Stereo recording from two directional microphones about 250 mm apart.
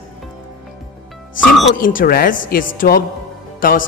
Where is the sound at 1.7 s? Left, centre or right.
Left.